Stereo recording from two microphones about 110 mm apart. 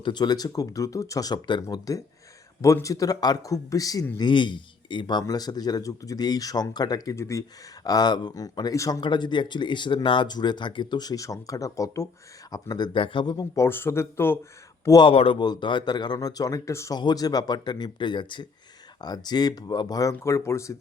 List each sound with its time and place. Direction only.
0.0 s speech: 40° left (ahead or behind)
1.6 s speech: 30° left (ahead or behind)
4.2 s speech: 45° left (ahead or behind)
9.0 s speech: 45° left (ahead or behind); by 14.3 s 20° left (ahead or behind)
15.0 s speech: 55° left (ahead or behind)
15.4 s speech: 45° left (ahead or behind); by 17.0 s 25° left (ahead or behind)
17.0 s speech: 40° left (ahead or behind)